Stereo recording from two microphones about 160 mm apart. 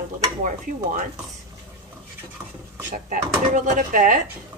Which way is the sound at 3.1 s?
50° right (ahead or behind).